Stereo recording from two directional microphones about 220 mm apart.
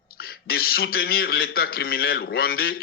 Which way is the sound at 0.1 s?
45° left (ahead or behind).